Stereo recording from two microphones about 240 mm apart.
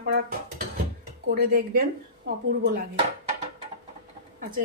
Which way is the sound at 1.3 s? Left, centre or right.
Right.